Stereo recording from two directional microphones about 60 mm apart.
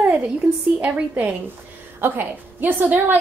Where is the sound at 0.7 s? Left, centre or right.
Right.